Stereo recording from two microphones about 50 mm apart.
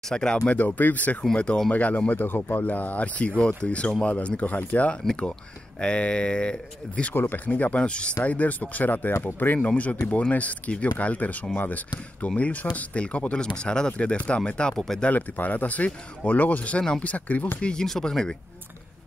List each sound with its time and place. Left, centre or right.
0.1 s speech: centre
0.6 s speech: left
1.3 s speech: left
2.2 s speech: left
9.6 s speech: left
15.0 s speech: left
17.6 s speech: centre